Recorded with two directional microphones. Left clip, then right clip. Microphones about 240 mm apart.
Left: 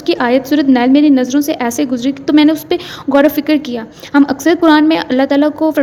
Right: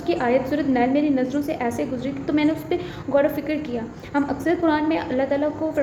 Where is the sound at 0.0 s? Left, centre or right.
Left.